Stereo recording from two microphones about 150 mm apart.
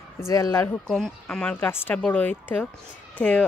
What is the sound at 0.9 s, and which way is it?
Speech, 5° left (ahead or behind).